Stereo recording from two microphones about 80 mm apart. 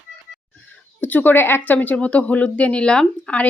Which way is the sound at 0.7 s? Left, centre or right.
Left.